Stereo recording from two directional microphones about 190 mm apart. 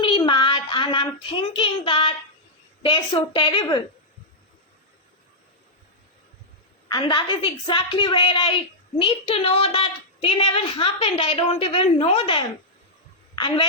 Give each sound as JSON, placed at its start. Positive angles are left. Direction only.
{"t": 0.0, "sound": "child singing", "side_deg": 25}
{"t": 2.8, "sound": "a woman's voice", "side_deg": 25}
{"t": 6.8, "sound": "a woman's voice", "side_deg": 20}